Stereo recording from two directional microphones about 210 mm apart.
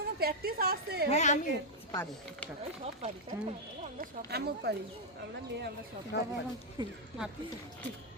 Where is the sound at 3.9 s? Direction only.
50° right (ahead or behind).